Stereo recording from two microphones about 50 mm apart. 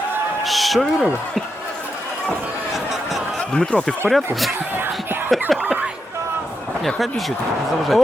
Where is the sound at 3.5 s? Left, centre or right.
Centre.